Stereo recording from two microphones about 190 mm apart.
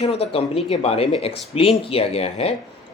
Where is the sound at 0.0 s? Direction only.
35° left (ahead or behind).